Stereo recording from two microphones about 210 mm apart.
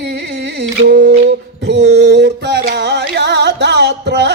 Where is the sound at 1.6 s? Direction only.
55° right (ahead or behind).